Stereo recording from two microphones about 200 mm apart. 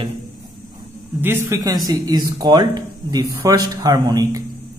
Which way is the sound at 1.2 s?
10° right (ahead or behind).